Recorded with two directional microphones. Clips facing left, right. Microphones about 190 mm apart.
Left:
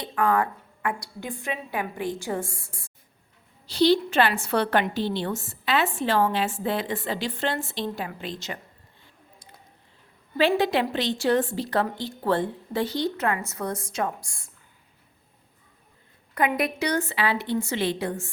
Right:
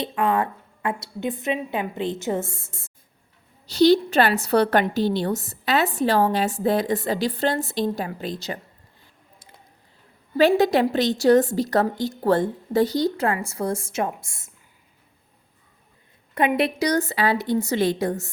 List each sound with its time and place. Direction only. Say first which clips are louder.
0.0 s a woman's voice: right 1 dB; 25° right (ahead or behind)
3.7 s a woman's voice: right 4 dB; 45° right (ahead or behind)
10.3 s a woman's voice: right 5 dB; 45° right (ahead or behind); by 14.5 s 25° right (ahead or behind)
16.6 s a woman's voice: right 4 dB; 35° right (ahead or behind)